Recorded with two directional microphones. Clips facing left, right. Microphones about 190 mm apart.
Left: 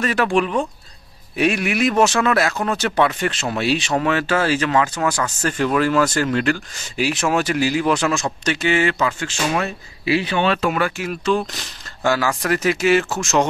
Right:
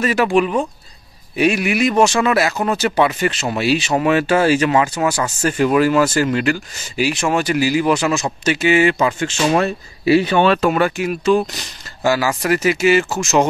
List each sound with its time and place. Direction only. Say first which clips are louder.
0.0 s speech: right 3 dB; 5° right (ahead or behind)
9.5 s speech: right 7 dB; 40° right (ahead or behind)
10.8 s speech: right 5 dB; 15° right (ahead or behind)